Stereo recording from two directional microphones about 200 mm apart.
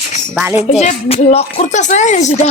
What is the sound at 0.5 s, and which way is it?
Speech, 35° left (ahead or behind).